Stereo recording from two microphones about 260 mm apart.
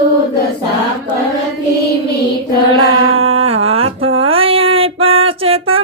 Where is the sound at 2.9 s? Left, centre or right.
Right.